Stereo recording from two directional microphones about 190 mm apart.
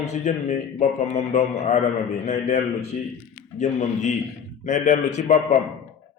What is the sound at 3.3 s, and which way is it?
A man's voice, 40° left (ahead or behind).